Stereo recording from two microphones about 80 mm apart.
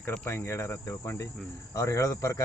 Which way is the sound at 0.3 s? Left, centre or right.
Left.